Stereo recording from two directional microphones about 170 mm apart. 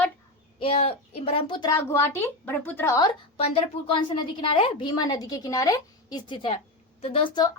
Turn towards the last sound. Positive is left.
turn(degrees=25)  # may be behind; listen again after turning